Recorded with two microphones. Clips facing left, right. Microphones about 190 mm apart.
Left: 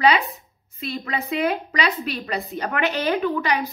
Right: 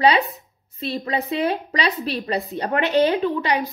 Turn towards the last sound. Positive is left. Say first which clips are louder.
# right 1 dB
turn(degrees=-30)  # may be behind; listen again after turning